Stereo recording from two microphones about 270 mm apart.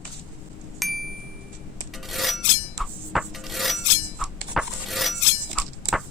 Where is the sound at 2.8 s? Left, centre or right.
Centre.